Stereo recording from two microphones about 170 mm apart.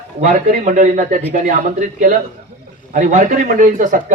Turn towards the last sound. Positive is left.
turn(degrees=-50)  # may be behind; listen again after turning